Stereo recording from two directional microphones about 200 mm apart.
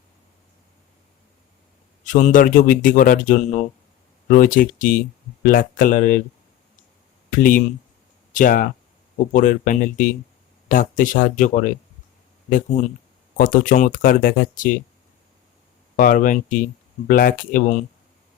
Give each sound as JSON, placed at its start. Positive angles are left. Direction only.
{"t": 2.0, "sound": "speech", "side_deg": 40}
{"t": 7.3, "sound": "speech", "side_deg": 40}
{"t": 13.3, "sound": "speech", "side_deg": 45}
{"t": 16.0, "sound": "speech", "side_deg": 45}